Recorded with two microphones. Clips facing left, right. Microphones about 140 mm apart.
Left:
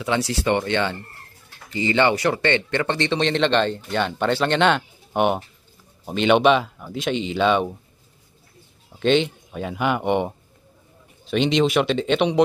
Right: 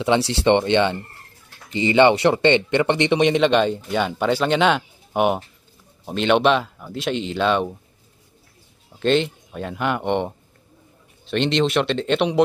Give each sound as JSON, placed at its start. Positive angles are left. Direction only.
{"t": 0.0, "sound": "speech", "side_deg": -25}
{"t": 9.0, "sound": "speech", "side_deg": 0}